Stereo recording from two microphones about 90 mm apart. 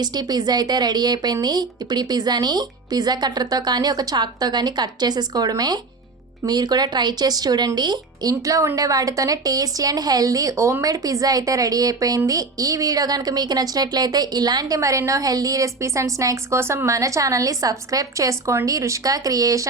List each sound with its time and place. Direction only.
0.0 s speech: 50° right (ahead or behind)